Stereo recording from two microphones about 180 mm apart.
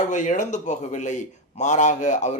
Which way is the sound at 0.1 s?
45° left (ahead or behind).